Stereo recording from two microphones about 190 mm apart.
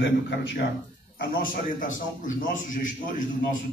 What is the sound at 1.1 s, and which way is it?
Speech, 45° left (ahead or behind).